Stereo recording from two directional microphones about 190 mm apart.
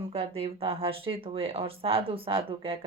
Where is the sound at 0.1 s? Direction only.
30° right (ahead or behind).